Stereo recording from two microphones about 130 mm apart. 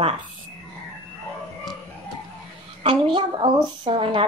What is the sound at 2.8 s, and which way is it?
A woman's voice, 40° right (ahead or behind).